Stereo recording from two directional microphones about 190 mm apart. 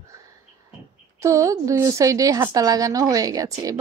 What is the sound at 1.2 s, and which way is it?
A woman's voice, 15° right (ahead or behind).